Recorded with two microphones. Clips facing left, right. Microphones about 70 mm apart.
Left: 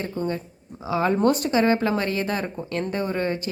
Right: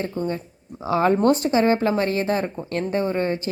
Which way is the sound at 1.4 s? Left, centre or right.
Right.